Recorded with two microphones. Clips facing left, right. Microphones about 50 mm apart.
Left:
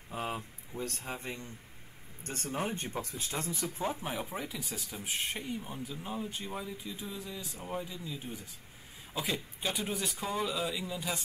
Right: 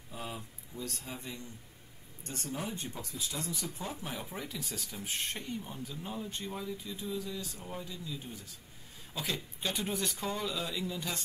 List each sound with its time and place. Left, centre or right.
0.1 s speech: left; by 11.1 s centre